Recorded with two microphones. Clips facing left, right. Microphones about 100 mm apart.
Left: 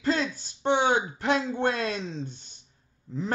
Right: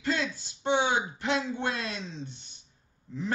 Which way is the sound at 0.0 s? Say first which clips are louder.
Left 4 dB; 40° left (ahead or behind).